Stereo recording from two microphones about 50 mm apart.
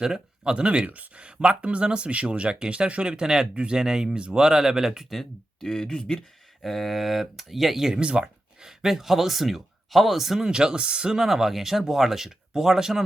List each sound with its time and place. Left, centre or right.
0.0 s speech: centre
5.1 s speech: centre
6.6 s speech: centre